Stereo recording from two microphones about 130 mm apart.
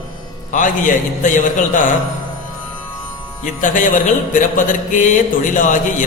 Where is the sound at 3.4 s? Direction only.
80° left.